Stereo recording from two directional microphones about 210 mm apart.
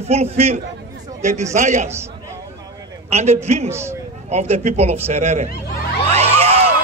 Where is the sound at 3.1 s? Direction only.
30° right (ahead or behind).